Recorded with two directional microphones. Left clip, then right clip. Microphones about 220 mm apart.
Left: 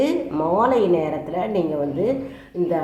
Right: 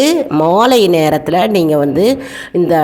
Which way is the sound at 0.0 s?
45° right (ahead or behind).